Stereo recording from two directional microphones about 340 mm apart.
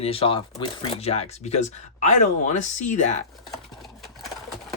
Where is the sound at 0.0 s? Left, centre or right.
Centre.